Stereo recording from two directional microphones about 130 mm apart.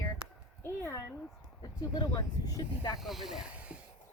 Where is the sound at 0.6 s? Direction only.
20° left (ahead or behind).